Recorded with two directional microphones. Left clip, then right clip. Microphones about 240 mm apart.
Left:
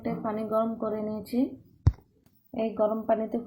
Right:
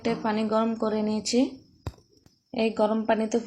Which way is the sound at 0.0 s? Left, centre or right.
Right.